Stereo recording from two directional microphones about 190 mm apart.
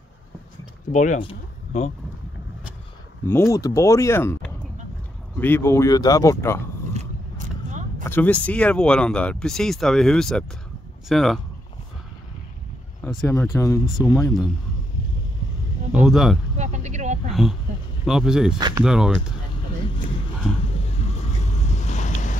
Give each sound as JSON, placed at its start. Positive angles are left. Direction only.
{"t": 0.9, "sound": "speech", "side_deg": 40}
{"t": 1.2, "sound": "a sound", "side_deg": 35}
{"t": 3.3, "sound": "speech", "side_deg": 15}
{"t": 6.9, "sound": "vehicle", "side_deg": -40}
{"t": 8.0, "sound": "speech", "side_deg": 10}
{"t": 13.0, "sound": "speech", "side_deg": 10}
{"t": 15.9, "sound": "speech", "side_deg": 0}
{"t": 16.5, "sound": "a sound", "side_deg": -40}
{"t": 18.0, "sound": "speech", "side_deg": 0}
{"t": 20.6, "sound": "a sound", "side_deg": 30}
{"t": 21.5, "sound": "vehicle", "side_deg": 40}